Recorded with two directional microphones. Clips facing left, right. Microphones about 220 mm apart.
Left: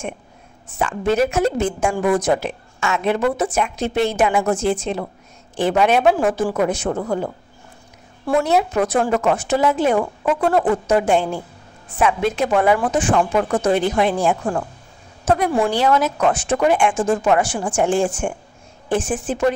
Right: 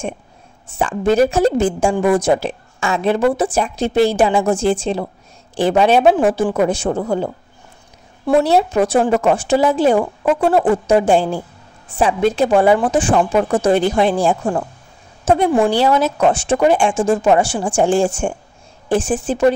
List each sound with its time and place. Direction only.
0.7 s a woman's voice: 30° right (ahead or behind)
8.4 s a woman's voice: 30° right (ahead or behind)